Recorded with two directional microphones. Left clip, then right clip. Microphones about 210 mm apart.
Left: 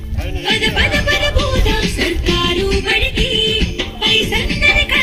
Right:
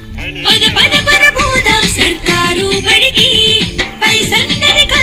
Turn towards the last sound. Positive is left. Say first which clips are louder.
# right 5 dB
turn(degrees=-30)  # may be behind; listen again after turning